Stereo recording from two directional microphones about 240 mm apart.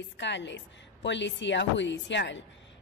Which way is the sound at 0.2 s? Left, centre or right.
Left.